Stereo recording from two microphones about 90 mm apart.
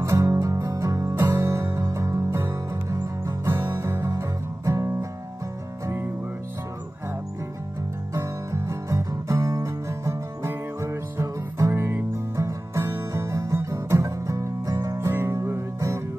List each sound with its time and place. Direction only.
0.0 s music: 35° right (ahead or behind)
4.6 s guitar: 35° right (ahead or behind)
8.1 s music: 30° right (ahead or behind)